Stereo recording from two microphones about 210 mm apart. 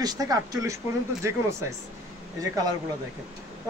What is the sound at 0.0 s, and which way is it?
Speech, 20° right (ahead or behind).